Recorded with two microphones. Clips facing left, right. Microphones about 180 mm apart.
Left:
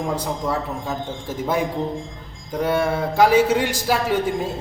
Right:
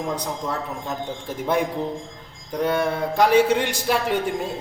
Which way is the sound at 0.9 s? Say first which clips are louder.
Left 1 dB; 5° left (ahead or behind).